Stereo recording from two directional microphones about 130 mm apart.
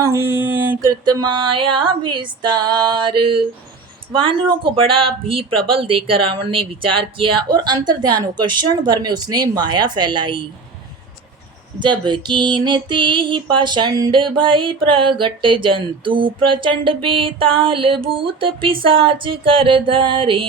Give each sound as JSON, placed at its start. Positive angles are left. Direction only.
{"t": 0.0, "sound": "a sound", "side_deg": -20}
{"t": 0.8, "sound": "music", "side_deg": -25}
{"t": 11.8, "sound": "music", "side_deg": -35}